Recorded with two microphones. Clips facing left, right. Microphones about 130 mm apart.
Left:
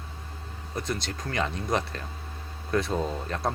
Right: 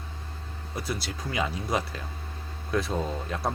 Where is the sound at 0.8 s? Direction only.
5° right (ahead or behind).